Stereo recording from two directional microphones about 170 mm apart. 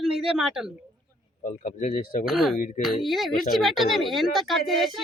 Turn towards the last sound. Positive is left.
turn(degrees=0)  # may be behind; listen again after turning